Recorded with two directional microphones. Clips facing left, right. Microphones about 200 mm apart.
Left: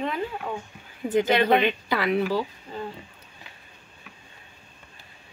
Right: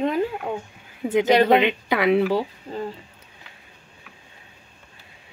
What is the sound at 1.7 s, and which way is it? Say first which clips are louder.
Speech: right 5 dB; 20° right (ahead or behind).